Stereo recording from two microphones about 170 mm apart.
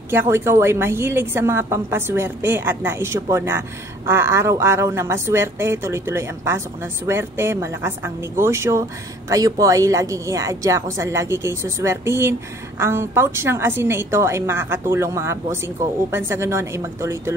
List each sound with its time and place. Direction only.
0.1 s a woman's voice: 15° right (ahead or behind)